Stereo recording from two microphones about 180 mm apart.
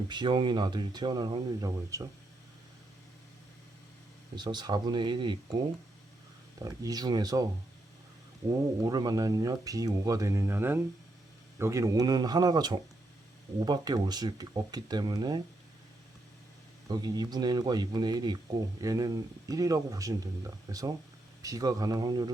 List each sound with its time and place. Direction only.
0.1 s speech: 25° right (ahead or behind)
4.4 s speech: 25° right (ahead or behind)
6.6 s speech: 20° right (ahead or behind)
8.4 s speech: 20° right (ahead or behind)
16.9 s speech: 25° right (ahead or behind)